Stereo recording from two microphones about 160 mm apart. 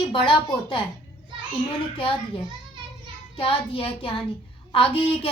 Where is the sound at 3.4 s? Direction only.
35° left (ahead or behind).